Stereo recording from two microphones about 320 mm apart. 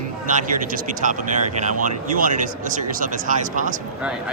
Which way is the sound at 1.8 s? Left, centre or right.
Right.